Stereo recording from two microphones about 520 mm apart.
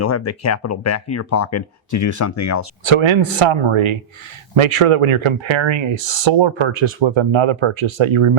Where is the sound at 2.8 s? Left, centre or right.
Right.